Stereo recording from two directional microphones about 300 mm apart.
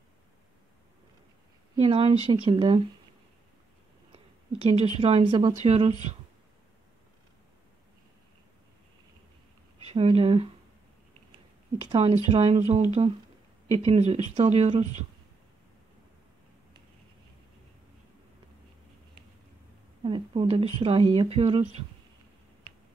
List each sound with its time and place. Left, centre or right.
1.8 s speech: centre
4.7 s speech: centre
9.8 s speech: centre
11.9 s speech: centre
20.0 s speech: centre